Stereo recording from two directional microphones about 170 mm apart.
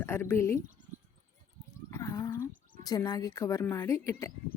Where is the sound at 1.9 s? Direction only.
20° left (ahead or behind).